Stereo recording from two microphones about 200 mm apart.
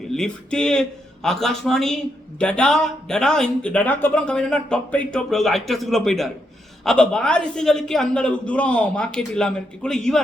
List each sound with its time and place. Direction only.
0.1 s speech: 5° left (ahead or behind)